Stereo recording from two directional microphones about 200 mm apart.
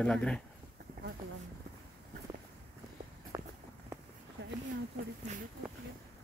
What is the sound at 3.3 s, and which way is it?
Walk, 15° right (ahead or behind).